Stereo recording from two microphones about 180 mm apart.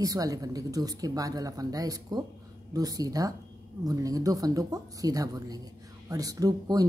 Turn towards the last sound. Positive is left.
turn(degrees=-20)  # may be behind; listen again after turning